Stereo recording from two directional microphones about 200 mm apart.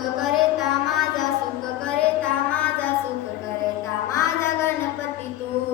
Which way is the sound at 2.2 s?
5° left (ahead or behind).